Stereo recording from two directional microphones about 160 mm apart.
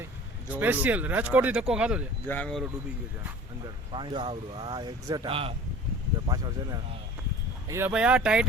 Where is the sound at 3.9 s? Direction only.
30° right (ahead or behind).